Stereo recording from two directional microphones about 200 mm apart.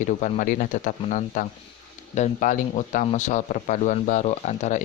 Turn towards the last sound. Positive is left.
turn(degrees=35)  # may be behind; listen again after turning